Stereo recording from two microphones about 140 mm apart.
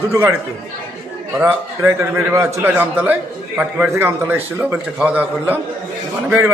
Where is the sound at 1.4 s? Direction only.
15° right (ahead or behind).